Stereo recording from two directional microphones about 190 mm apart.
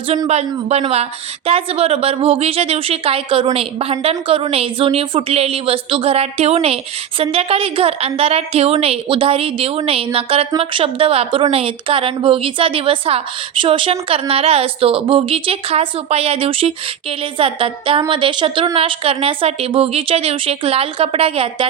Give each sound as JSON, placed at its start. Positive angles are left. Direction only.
{"t": 0.3, "sound": "a woman's voice", "side_deg": -35}